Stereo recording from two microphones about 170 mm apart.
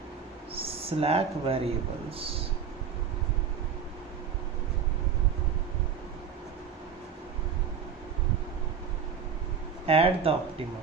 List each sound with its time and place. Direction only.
0.5 s speech: 35° right (ahead or behind)
9.8 s speech: 35° right (ahead or behind)